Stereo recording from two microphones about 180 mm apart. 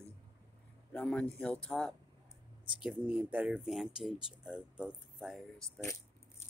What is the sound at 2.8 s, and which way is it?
Speech, 5° right (ahead or behind).